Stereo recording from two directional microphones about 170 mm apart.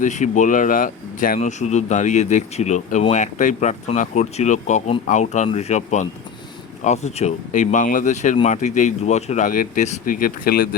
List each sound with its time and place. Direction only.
0.0 s speech: 45° left (ahead or behind)